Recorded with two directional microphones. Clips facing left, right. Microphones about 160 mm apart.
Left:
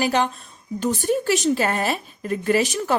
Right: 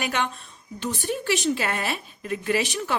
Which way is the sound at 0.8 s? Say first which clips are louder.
Left 7 dB; 45° left (ahead or behind).